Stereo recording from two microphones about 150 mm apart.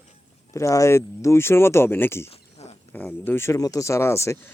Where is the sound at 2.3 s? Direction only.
45° left (ahead or behind).